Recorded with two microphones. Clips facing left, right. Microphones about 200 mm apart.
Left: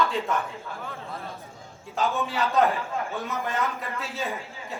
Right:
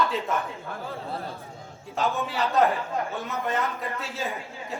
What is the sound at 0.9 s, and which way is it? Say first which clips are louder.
Speech: right 4 dB; 30° right (ahead or behind).